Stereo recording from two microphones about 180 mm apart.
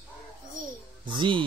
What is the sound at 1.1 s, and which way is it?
Speech, 25° right (ahead or behind).